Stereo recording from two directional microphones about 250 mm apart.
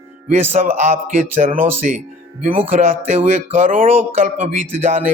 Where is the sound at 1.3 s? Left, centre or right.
Right.